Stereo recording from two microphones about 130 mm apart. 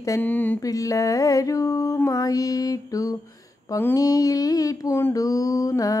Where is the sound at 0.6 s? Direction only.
25° left (ahead or behind).